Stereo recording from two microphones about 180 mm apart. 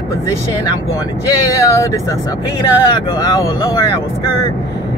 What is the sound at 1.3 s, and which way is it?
Speech, 20° left (ahead or behind).